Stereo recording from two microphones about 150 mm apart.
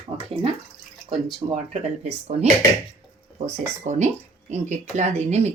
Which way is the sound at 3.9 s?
60° right (ahead or behind).